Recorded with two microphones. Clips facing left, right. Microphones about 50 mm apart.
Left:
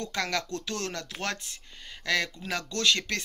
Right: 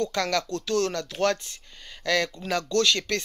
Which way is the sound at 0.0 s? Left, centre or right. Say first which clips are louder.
Right 5 dB; left.